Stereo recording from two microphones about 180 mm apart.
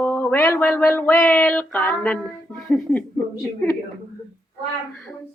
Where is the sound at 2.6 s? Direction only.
5° left (ahead or behind).